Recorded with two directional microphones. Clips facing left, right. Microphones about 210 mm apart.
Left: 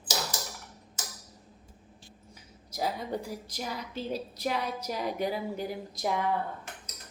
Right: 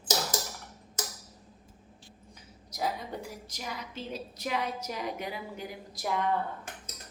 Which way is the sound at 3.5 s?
35° left (ahead or behind).